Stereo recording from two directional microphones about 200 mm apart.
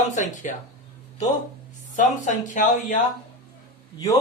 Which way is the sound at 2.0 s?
40° left (ahead or behind).